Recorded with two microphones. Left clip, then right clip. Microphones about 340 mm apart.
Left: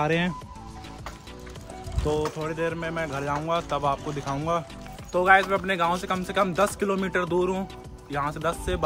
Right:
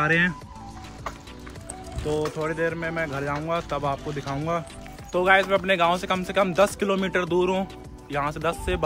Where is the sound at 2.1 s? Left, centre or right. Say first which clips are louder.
Even; left.